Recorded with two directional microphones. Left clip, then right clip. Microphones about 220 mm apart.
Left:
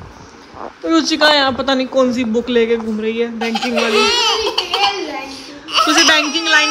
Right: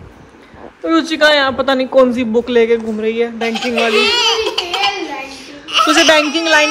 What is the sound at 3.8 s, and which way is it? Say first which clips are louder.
Baby cry: right 1 dB; 50° left (ahead or behind).